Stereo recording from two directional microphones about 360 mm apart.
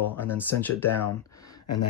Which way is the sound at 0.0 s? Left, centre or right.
Centre.